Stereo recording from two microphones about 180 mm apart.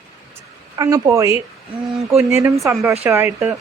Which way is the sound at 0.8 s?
15° right (ahead or behind).